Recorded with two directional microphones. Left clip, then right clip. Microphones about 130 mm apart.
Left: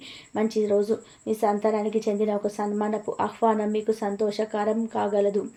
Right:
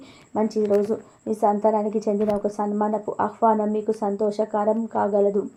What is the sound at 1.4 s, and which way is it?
A woman's voice, 40° right (ahead or behind).